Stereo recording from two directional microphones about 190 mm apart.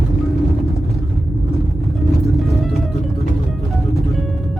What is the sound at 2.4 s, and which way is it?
Music, centre (ahead or behind).